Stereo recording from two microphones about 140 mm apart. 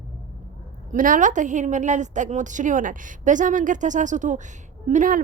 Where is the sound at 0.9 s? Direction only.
70° right (ahead or behind).